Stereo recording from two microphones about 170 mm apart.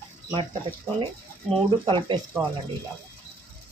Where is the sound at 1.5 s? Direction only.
30° right (ahead or behind).